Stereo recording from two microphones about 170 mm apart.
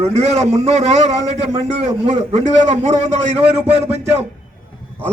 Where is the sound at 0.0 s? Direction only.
40° right (ahead or behind).